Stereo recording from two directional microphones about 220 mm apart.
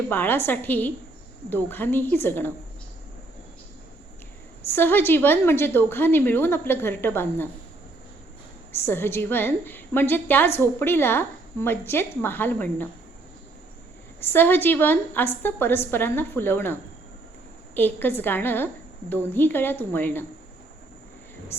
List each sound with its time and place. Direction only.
0.1 s a woman's voice: 10° left (ahead or behind)
4.7 s a woman's voice: 10° left (ahead or behind)
8.7 s a woman's voice: 10° left (ahead or behind)
14.2 s a woman's voice: 10° left (ahead or behind)
17.7 s a woman's voice: 10° left (ahead or behind)
21.5 s speech: 10° left (ahead or behind)